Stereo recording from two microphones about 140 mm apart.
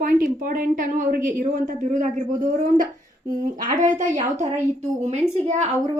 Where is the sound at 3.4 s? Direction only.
65° right (ahead or behind).